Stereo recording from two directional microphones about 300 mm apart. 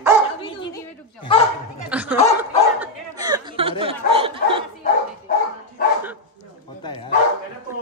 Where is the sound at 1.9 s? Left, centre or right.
Centre.